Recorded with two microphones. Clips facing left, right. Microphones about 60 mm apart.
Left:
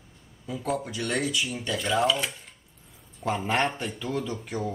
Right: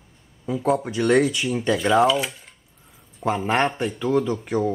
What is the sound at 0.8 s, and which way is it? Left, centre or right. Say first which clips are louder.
Speech: right 11 dB; right.